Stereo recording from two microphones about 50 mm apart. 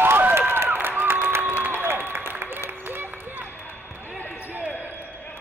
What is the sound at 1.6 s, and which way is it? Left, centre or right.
Applause, right.